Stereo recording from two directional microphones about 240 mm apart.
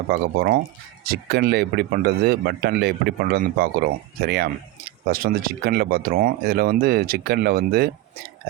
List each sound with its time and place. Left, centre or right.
0.1 s speech: right